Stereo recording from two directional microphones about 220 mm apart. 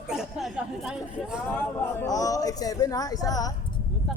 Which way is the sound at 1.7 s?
10° left (ahead or behind).